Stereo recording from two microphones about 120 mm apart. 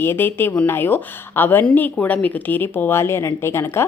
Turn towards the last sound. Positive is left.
turn(degrees=20)  # may be behind; listen again after turning